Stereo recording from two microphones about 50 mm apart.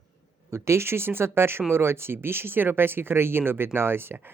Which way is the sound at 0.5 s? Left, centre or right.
Right.